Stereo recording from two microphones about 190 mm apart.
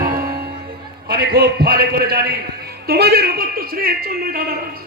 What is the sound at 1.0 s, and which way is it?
A man's voice, 55° right (ahead or behind).